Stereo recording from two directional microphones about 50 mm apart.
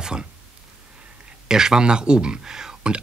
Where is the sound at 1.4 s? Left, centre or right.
Centre.